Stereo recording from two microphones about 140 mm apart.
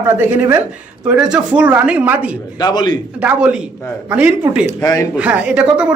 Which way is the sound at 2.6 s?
30° left (ahead or behind).